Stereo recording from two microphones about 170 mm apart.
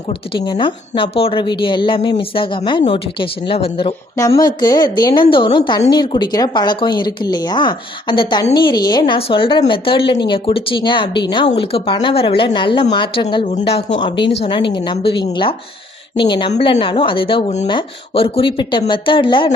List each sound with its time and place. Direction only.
0.3 s a woman's voice: 25° left (ahead or behind)
4.4 s a woman's voice: 25° left (ahead or behind)